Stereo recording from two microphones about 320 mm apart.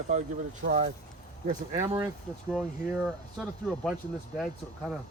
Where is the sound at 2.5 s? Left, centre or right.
Centre.